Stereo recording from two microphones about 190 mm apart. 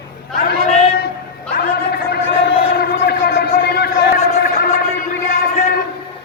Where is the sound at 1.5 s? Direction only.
55° left (ahead or behind).